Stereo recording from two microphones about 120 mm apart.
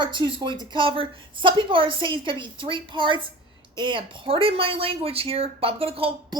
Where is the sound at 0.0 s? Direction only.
40° right (ahead or behind).